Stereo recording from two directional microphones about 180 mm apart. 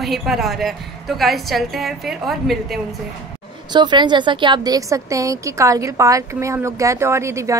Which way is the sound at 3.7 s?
25° right (ahead or behind).